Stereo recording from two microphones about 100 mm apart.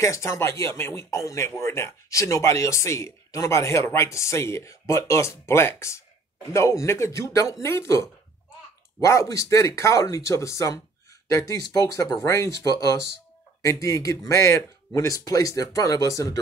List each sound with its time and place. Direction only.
0.0 s speech: 30° left (ahead or behind)